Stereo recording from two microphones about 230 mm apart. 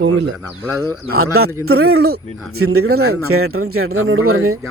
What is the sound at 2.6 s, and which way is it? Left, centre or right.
A man's voice, right.